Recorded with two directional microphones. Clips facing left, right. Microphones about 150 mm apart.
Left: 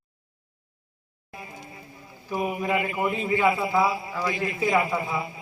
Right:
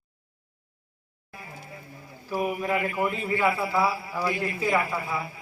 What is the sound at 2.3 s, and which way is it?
A man's voice, 20° left (ahead or behind).